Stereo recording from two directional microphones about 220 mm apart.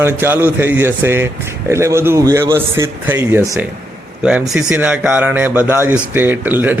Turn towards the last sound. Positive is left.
turn(degrees=-10)  # may be behind; listen again after turning